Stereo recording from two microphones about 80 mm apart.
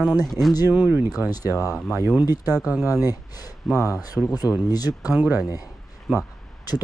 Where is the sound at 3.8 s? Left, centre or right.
Left.